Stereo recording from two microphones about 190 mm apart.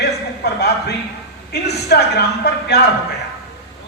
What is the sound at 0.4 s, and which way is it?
Speech, 60° left (ahead or behind).